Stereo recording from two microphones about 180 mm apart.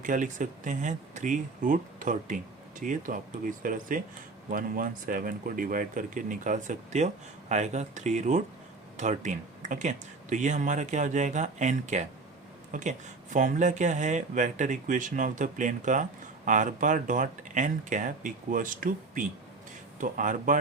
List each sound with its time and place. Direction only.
0.0 s speech: 45° right (ahead or behind)